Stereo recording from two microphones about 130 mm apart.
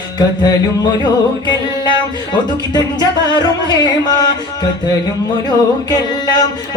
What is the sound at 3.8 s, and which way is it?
Music, 30° left (ahead or behind).